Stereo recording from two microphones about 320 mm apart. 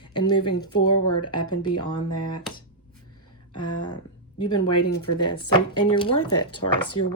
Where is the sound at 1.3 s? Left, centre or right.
Centre.